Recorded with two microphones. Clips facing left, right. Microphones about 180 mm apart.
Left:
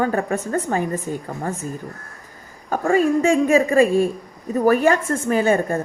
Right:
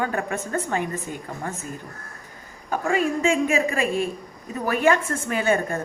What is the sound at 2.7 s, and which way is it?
A woman's voice, 40° left (ahead or behind).